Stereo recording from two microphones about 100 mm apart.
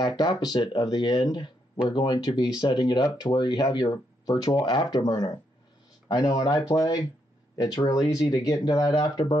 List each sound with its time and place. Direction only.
0.0 s speech: 45° left (ahead or behind)